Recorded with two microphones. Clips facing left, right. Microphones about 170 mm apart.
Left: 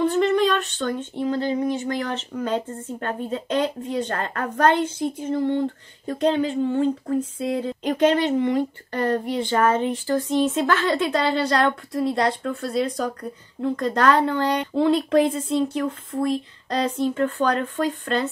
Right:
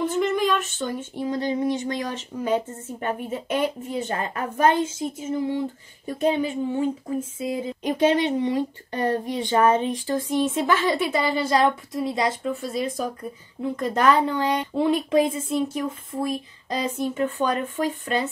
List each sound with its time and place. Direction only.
0.0 s speech: centre (ahead or behind)
1.2 s speech: 15° right (ahead or behind)
6.0 s a woman's voice: 10° right (ahead or behind)
10.3 s speech: 20° left (ahead or behind)
10.7 s a woman's voice: 20° right (ahead or behind)
11.1 s a woman's voice: 5° right (ahead or behind)